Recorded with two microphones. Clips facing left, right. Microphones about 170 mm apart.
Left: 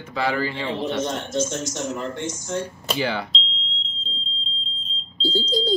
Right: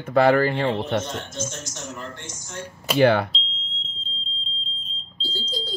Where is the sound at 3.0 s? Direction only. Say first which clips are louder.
Right 9 dB; 55° right (ahead or behind).